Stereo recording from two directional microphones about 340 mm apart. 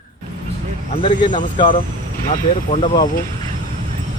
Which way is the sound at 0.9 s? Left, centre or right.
Centre.